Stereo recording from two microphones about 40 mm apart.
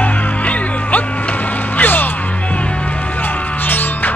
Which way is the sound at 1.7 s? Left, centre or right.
Left.